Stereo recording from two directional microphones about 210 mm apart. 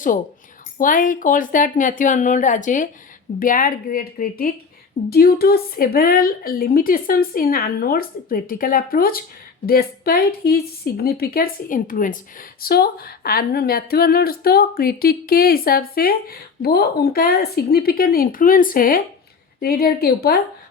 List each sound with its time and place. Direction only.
0.8 s a woman's voice: 40° left (ahead or behind)